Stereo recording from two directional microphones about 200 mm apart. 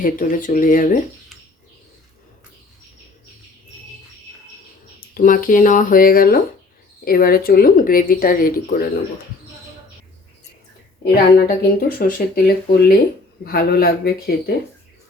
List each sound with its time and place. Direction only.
0.0 s speech: 40° left (ahead or behind)
4.9 s speech: 45° left (ahead or behind)
11.0 s speech: 50° left (ahead or behind)